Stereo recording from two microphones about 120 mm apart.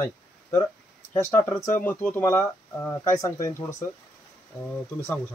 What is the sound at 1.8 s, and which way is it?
Speech, 15° left (ahead or behind).